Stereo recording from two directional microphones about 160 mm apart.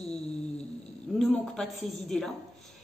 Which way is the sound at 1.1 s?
5° left (ahead or behind).